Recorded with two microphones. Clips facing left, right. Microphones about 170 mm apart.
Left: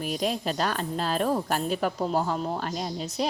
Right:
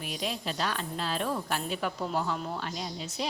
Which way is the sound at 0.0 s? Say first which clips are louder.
Left 7 dB; 45° left (ahead or behind).